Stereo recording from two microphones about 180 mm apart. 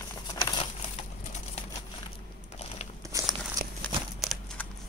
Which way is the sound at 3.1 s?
20° right (ahead or behind).